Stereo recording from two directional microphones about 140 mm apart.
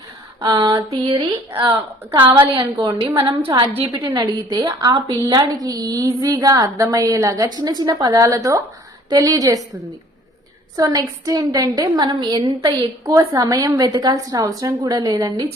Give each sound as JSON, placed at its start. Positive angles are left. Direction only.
{"t": 0.4, "sound": "a woman's voice", "side_deg": -30}
{"t": 10.8, "sound": "a woman's voice", "side_deg": -25}